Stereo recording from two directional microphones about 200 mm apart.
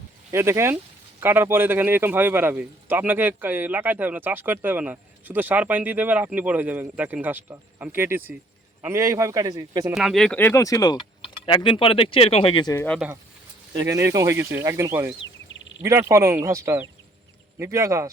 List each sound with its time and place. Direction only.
0.3 s a man's voice: 15° right (ahead or behind)
9.9 s speech: centre (ahead or behind); by 12.8 s 20° left (ahead or behind)
13.0 s a man's voice: 5° right (ahead or behind)
15.2 s a sound: 65° left (ahead or behind)
15.8 s a man's voice: 15° right (ahead or behind)